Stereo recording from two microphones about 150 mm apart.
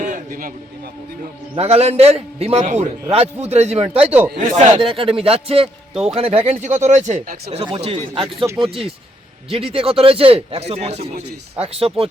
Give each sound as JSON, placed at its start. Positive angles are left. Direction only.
{"t": 0.0, "sound": "a sound", "side_deg": -60}
{"t": 1.5, "sound": "speech", "side_deg": -45}
{"t": 4.3, "sound": "a man's voice", "side_deg": -55}
{"t": 5.6, "sound": "a man's voice", "side_deg": -5}
{"t": 6.1, "sound": "speech", "side_deg": -40}
{"t": 7.5, "sound": "a man's voice", "side_deg": -40}